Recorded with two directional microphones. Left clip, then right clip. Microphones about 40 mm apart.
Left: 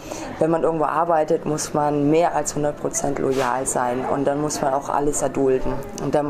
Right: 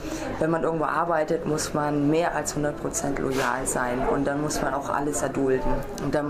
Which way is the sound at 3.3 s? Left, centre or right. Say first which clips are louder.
Left 2 dB; centre.